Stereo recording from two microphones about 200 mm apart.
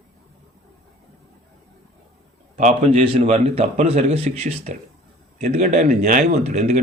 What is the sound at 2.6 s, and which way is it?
A man's voice, 35° right (ahead or behind).